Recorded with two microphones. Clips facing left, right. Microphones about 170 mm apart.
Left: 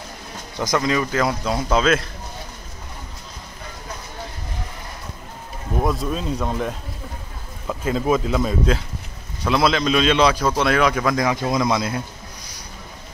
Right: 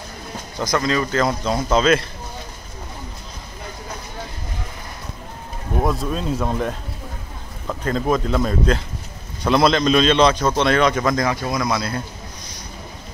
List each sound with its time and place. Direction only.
0.7 s speech: 15° left (ahead or behind)
5.9 s a man's voice: centre (ahead or behind)
11.3 s a man's voice: 20° left (ahead or behind)